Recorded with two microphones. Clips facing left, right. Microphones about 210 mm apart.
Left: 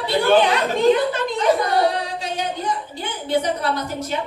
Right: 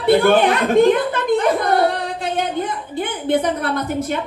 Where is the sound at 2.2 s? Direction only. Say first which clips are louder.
Right 4 dB; 55° right (ahead or behind).